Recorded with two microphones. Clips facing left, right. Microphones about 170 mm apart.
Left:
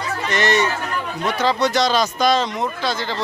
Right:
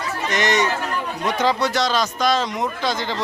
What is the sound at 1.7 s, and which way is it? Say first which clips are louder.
Speech: left 3 dB; centre (ahead or behind).